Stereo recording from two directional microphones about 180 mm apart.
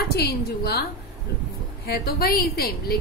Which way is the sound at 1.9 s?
60° left (ahead or behind).